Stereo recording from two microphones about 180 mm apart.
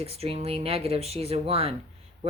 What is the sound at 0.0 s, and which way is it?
Speech, 35° right (ahead or behind).